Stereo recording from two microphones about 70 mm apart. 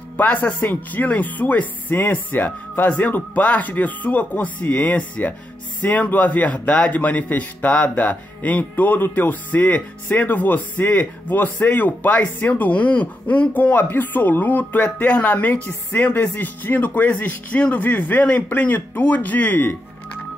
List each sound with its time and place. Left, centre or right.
0.2 s a man's voice: left